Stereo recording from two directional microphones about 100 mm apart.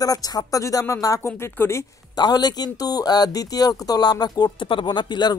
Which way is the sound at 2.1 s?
45° left (ahead or behind).